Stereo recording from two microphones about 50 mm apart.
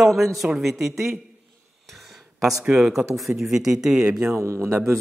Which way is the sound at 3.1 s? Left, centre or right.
Centre.